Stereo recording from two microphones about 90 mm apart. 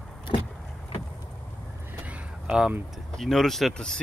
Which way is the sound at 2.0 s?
10° right (ahead or behind).